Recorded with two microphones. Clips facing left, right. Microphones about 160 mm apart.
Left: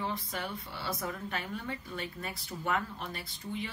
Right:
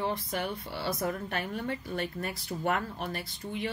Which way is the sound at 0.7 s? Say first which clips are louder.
Right 5 dB; 40° right (ahead or behind).